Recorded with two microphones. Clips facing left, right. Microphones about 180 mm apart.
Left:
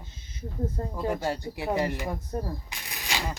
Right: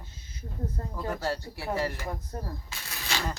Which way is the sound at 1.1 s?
15° left (ahead or behind).